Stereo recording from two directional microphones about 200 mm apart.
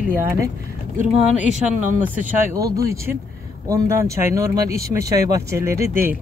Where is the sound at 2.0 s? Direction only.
10° right (ahead or behind).